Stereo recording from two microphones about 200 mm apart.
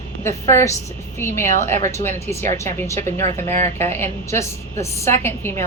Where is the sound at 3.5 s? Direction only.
35° right (ahead or behind).